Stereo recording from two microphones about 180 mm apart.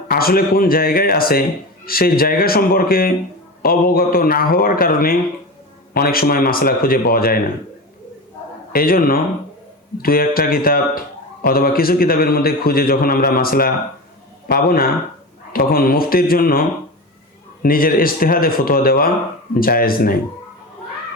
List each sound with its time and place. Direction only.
0.1 s speech: 55° left (ahead or behind)
8.7 s a man's voice: 55° left (ahead or behind)